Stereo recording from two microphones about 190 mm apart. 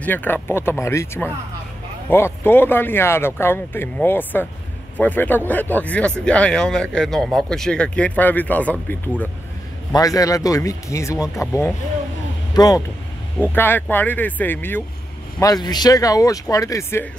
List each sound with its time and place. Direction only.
0.0 s speech: 10° left (ahead or behind)
9.9 s speech: 20° left (ahead or behind)